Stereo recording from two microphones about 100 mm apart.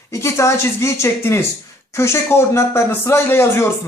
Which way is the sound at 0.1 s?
30° left (ahead or behind).